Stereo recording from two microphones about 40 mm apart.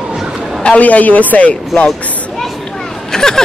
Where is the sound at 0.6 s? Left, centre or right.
Left.